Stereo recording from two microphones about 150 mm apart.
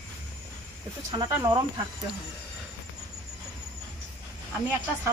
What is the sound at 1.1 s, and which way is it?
Speech, 25° right (ahead or behind).